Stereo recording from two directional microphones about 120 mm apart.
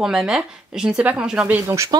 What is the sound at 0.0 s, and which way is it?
Speech, 5° right (ahead or behind).